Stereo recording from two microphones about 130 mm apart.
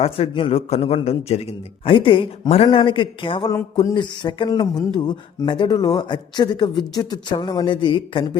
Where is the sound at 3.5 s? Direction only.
25° left (ahead or behind).